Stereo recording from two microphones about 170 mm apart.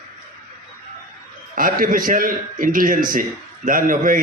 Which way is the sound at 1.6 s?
55° right (ahead or behind).